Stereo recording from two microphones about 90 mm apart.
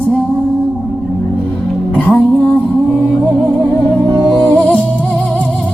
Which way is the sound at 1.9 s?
15° left (ahead or behind).